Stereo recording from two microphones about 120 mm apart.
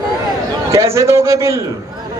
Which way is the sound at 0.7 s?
25° right (ahead or behind).